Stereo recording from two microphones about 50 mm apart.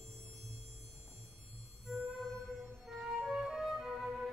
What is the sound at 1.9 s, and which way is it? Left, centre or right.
Music, centre.